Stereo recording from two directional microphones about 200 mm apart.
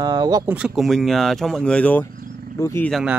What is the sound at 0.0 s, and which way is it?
Speech, 20° right (ahead or behind).